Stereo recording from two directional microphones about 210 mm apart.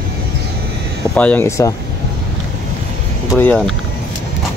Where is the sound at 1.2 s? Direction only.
10° left (ahead or behind).